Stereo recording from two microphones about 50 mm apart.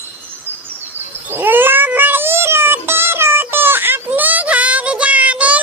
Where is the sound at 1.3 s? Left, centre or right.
Right.